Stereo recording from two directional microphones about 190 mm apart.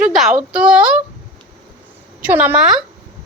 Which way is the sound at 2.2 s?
10° right (ahead or behind).